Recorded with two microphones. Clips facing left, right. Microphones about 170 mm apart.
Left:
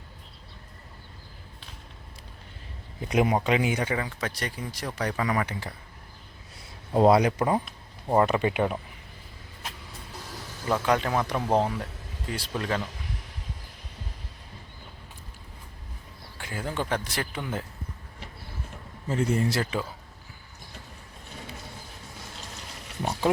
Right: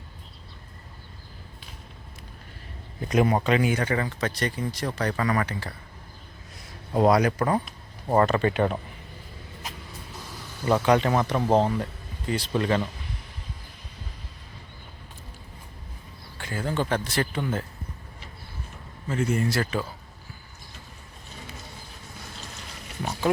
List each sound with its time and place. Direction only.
3.0 s speech: 15° left (ahead or behind)
3.9 s speech: 5° left (ahead or behind)
6.9 s speech: 25° left (ahead or behind)
7.6 s speech: 5° left (ahead or behind)
10.7 s speech: centre (ahead or behind)
16.4 s speech: 10° left (ahead or behind)
19.0 s speech: 30° left (ahead or behind)